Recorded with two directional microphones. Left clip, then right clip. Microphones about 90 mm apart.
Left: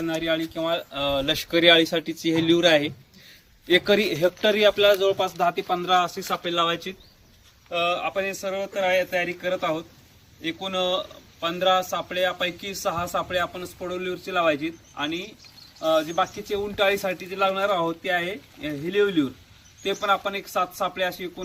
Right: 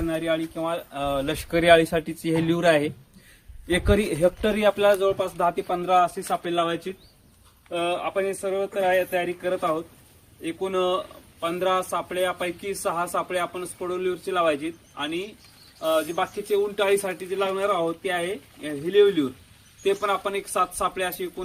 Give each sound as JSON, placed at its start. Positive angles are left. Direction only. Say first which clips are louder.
{"t": 0.0, "sound": "speech", "louder": "even", "side_deg": -5}
{"t": 1.4, "sound": "speech", "louder": "right 1 dB", "side_deg": -15}
{"t": 3.7, "sound": "speech", "louder": "left 3 dB", "side_deg": -20}
{"t": 8.4, "sound": "speech", "louder": "right 1 dB", "side_deg": -20}